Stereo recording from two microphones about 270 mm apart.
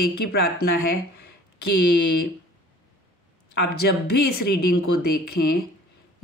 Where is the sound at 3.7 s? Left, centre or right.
Left.